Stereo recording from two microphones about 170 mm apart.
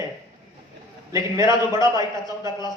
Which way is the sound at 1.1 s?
20° right (ahead or behind).